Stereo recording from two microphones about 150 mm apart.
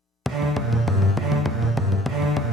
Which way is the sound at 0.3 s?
Centre (ahead or behind).